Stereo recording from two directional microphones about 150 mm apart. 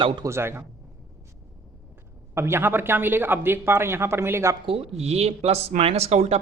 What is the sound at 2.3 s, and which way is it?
Speech, 15° right (ahead or behind).